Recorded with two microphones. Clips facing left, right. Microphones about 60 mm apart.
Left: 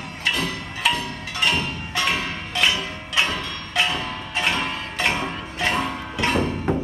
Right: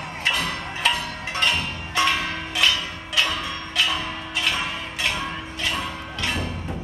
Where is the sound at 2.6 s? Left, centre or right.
Left.